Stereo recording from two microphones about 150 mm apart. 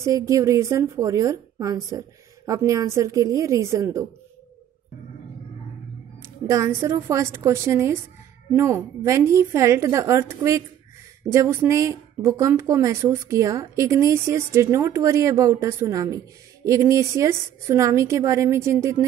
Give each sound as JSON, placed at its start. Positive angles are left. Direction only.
{"t": 0.0, "sound": "a woman's voice", "side_deg": -20}
{"t": 6.2, "sound": "a woman's voice", "side_deg": -20}